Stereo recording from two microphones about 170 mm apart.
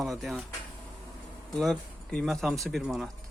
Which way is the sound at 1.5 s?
5° left (ahead or behind).